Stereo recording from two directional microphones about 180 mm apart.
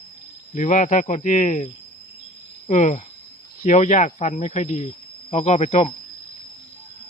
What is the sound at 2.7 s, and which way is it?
Speech, 40° left (ahead or behind).